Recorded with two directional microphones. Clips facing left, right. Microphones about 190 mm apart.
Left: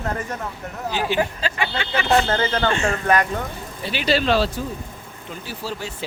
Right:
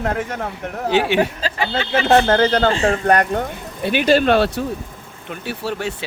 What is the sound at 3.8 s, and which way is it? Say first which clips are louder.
Speech: right 6 dB; 55° right (ahead or behind).